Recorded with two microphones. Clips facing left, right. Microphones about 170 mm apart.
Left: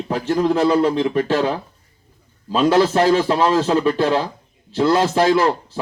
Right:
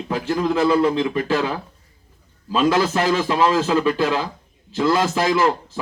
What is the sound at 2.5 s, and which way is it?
A man's voice, 35° left (ahead or behind).